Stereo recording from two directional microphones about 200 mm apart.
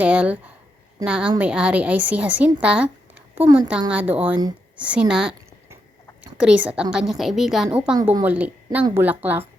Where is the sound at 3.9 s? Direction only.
5° right (ahead or behind).